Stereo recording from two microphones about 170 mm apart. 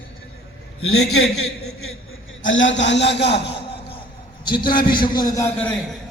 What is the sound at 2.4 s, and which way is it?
Speech, 90° left.